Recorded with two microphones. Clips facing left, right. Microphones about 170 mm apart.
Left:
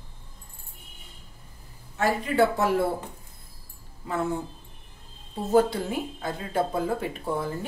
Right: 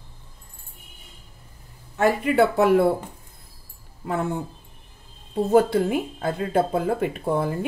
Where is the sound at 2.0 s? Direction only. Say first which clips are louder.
Right 4 dB; 60° right (ahead or behind).